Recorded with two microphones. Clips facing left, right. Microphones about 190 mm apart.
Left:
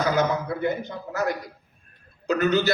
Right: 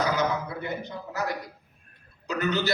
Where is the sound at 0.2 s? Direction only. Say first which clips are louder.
Left 5 dB; 50° left (ahead or behind).